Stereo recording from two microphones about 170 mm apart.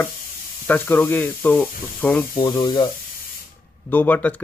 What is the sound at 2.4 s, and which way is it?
Speech, 25° left (ahead or behind).